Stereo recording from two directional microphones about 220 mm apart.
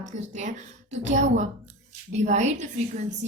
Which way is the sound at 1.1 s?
35° right (ahead or behind).